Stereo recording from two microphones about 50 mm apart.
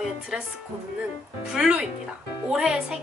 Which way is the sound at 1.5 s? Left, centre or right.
Centre.